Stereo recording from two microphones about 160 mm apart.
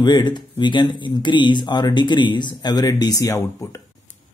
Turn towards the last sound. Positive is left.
turn(degrees=15)  # may be behind; listen again after turning